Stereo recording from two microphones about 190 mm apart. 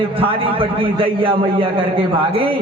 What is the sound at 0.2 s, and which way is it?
A man's voice, 30° right (ahead or behind).